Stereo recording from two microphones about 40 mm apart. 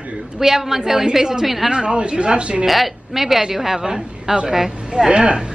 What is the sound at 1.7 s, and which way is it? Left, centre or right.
Speech, right.